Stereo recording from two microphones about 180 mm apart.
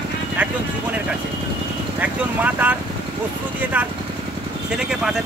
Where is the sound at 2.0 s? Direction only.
10° right (ahead or behind).